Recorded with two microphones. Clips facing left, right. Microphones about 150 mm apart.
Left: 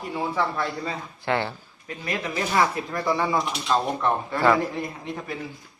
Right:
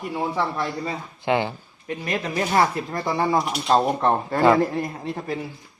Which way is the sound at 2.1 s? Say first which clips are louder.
Right 2 dB; 35° right (ahead or behind).